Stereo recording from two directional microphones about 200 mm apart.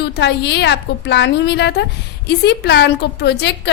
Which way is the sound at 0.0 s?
60° left (ahead or behind).